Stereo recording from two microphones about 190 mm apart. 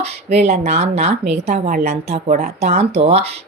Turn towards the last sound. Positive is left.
turn(degrees=-35)  # may be behind; listen again after turning